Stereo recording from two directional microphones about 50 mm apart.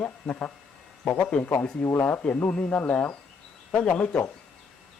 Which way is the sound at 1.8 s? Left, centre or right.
Left.